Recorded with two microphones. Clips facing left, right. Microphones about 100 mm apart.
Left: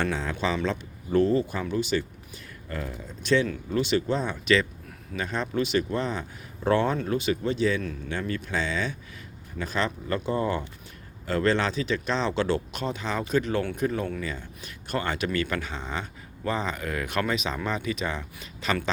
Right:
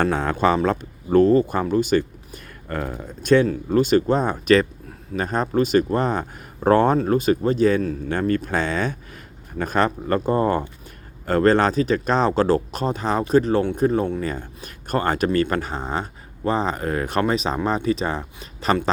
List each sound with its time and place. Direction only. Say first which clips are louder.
0.0 s speech: right 8 dB; 55° right (ahead or behind); by 18.8 s 35° right (ahead or behind)